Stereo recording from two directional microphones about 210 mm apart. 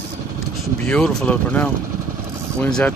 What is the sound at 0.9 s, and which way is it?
Speech, 5° left (ahead or behind).